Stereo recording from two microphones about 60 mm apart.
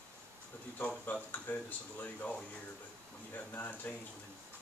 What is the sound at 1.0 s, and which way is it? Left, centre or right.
Speech, left.